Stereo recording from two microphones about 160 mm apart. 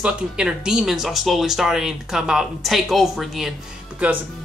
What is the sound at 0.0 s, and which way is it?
Speech, 5° right (ahead or behind).